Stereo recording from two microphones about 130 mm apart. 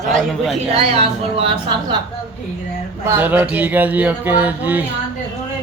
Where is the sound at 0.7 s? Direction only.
45° right (ahead or behind).